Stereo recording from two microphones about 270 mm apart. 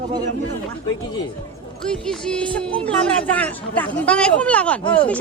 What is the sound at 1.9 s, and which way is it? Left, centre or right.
Speech, centre.